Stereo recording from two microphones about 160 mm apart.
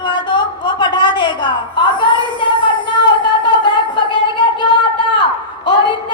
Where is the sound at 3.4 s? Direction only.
30° left (ahead or behind).